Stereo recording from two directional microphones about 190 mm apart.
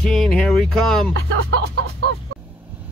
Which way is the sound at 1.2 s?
75° right (ahead or behind).